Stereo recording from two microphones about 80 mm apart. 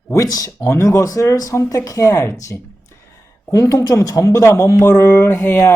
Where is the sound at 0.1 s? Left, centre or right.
Left.